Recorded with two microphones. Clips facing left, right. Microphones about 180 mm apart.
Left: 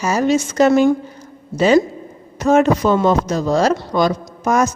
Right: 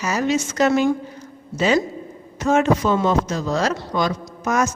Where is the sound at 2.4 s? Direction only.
35° left (ahead or behind).